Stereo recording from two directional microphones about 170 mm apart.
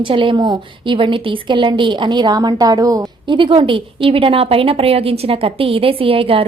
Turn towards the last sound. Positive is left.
turn(degrees=-35)  # may be behind; listen again after turning